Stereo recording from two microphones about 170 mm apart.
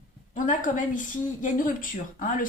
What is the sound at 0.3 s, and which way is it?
A woman's voice, 50° left (ahead or behind).